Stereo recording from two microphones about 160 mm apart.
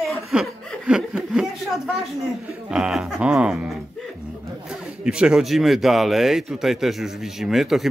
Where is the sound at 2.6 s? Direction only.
5° right (ahead or behind).